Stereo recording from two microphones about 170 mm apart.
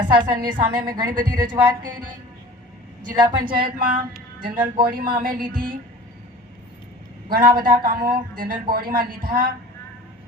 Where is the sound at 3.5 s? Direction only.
55° right (ahead or behind).